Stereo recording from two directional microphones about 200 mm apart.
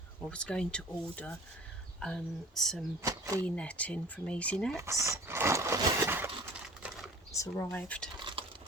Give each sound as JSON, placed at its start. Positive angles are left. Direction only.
{"t": 0.3, "sound": "speech", "side_deg": 5}
{"t": 3.0, "sound": "speech", "side_deg": -15}
{"t": 3.4, "sound": "speech", "side_deg": 5}
{"t": 4.8, "sound": "speech", "side_deg": -15}
{"t": 7.3, "sound": "speech", "side_deg": 15}
{"t": 8.2, "sound": "patter", "side_deg": -25}